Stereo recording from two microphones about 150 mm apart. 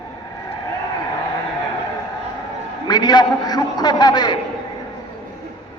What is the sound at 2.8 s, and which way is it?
A man's voice, 25° left (ahead or behind).